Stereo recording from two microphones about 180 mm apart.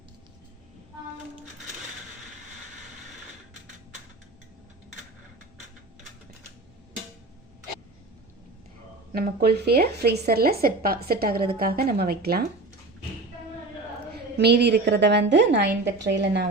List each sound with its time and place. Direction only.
9.1 s speech: 60° right (ahead or behind)
14.3 s a woman's voice: 65° right (ahead or behind)